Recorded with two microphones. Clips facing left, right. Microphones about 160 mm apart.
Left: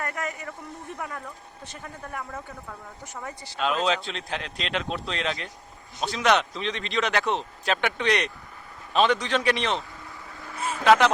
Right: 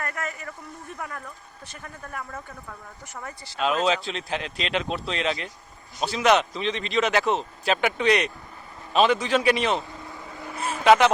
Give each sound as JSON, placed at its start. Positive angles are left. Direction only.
{"t": 0.0, "sound": "speech", "side_deg": 15}
{"t": 3.2, "sound": "speech", "side_deg": 20}
{"t": 3.6, "sound": "a man's voice", "side_deg": -5}
{"t": 10.4, "sound": "vehicle", "side_deg": -20}
{"t": 10.8, "sound": "speech", "side_deg": -5}